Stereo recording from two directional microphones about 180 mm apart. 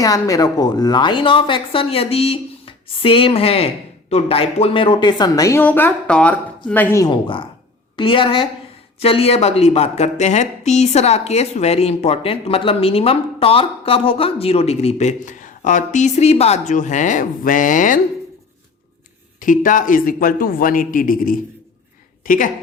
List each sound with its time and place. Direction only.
0.0 s speech: 20° left (ahead or behind); by 18.0 s 45° left (ahead or behind)
19.4 s a man's voice: 45° left (ahead or behind)